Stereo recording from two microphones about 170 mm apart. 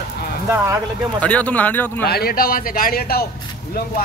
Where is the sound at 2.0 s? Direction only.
65° left (ahead or behind).